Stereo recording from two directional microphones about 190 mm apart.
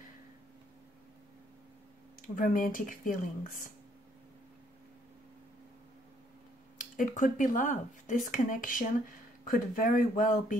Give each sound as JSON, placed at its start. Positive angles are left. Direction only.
{"t": 2.2, "sound": "speech", "side_deg": 45}
{"t": 6.8, "sound": "speech", "side_deg": 45}